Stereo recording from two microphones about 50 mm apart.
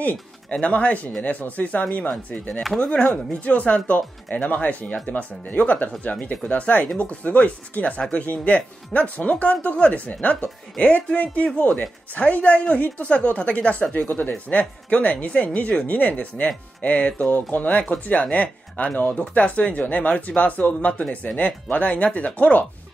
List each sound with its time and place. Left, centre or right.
0.0 s speech: left